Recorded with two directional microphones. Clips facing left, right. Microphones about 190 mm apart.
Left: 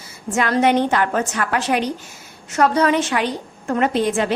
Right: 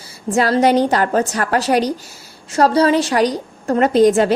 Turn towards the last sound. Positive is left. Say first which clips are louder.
# right 7 dB
turn(degrees=-40)  # may be behind; listen again after turning